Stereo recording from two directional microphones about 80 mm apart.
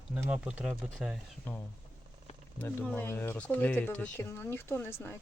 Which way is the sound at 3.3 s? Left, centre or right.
Centre.